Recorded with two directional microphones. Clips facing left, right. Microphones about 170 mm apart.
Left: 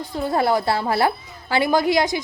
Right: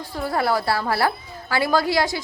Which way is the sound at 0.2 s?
20° left (ahead or behind).